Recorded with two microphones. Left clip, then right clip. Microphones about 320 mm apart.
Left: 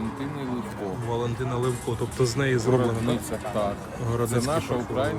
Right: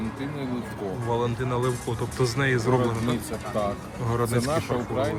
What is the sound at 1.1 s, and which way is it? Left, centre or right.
Speech, centre.